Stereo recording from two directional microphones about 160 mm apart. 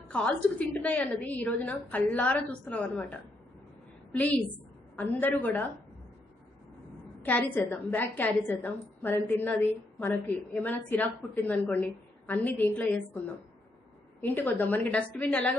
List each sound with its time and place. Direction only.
0.1 s a woman's voice: 10° left (ahead or behind)
7.2 s a woman's voice: 10° left (ahead or behind)
14.2 s a woman's voice: 10° left (ahead or behind)